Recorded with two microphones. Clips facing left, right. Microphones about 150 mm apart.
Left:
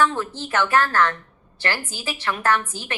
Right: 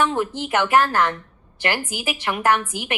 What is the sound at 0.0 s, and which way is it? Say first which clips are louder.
A woman's voice: right 1 dB; 15° right (ahead or behind).